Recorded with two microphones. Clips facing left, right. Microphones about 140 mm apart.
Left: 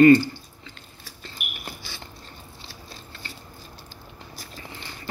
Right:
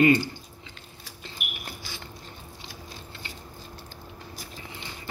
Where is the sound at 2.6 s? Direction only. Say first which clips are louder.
Right 2 dB; 15° right (ahead or behind).